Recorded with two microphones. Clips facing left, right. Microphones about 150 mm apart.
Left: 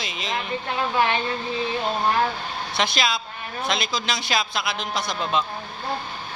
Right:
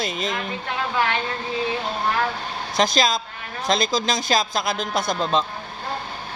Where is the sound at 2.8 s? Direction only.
40° right (ahead or behind).